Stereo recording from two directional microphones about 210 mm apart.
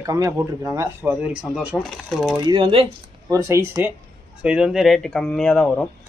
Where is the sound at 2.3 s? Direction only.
20° right (ahead or behind).